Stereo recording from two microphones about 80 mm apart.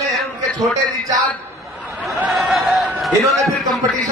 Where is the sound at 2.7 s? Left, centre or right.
Centre.